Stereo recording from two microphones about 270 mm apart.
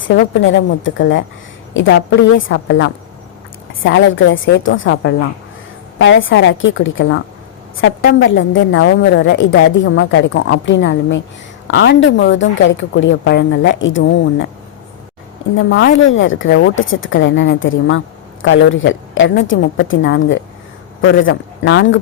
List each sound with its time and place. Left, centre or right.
0.0 s a woman's voice: left
15.5 s a woman's voice: left